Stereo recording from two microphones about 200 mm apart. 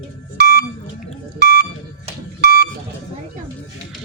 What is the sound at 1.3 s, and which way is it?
Buzzer, 55° right (ahead or behind).